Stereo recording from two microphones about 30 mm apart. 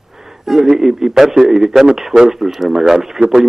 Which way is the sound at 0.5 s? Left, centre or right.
Centre.